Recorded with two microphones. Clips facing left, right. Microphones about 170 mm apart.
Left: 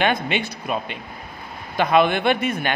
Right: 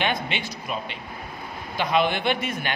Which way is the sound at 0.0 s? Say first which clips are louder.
Left 5 dB; 50° left (ahead or behind).